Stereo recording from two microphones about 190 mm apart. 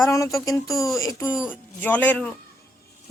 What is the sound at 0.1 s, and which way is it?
Speech, 15° left (ahead or behind).